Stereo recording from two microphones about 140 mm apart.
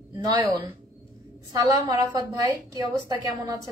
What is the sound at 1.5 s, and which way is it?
A woman's voice, 30° right (ahead or behind).